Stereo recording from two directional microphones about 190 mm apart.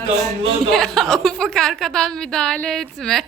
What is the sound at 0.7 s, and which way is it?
A woman's voice, centre (ahead or behind).